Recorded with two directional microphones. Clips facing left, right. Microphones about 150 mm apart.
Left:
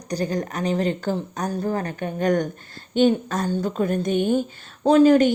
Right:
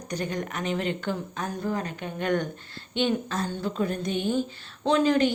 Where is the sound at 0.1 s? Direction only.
35° left (ahead or behind); by 4.4 s 50° left (ahead or behind).